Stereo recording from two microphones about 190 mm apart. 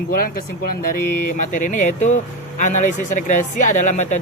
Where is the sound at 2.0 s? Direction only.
40° left (ahead or behind).